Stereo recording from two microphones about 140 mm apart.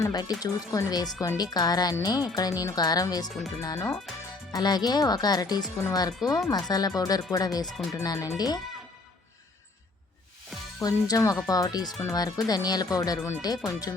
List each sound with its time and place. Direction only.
0.0 s speech: 25° left (ahead or behind)
10.8 s speech: 25° left (ahead or behind)